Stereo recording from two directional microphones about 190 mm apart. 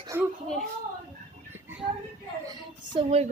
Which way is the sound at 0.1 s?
10° right (ahead or behind).